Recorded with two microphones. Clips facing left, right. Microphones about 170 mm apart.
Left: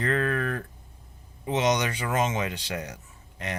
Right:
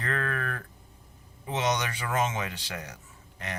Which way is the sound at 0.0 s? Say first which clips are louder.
Left 6 dB; 20° left (ahead or behind).